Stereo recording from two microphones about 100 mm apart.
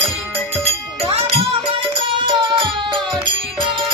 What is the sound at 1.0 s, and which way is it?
Music, 65° right (ahead or behind).